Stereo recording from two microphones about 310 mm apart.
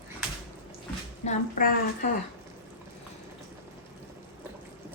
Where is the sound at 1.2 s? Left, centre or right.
Left.